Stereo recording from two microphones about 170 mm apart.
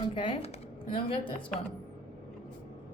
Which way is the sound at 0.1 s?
30° left (ahead or behind).